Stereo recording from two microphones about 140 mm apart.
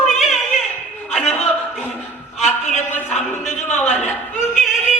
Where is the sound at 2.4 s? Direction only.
55° left (ahead or behind).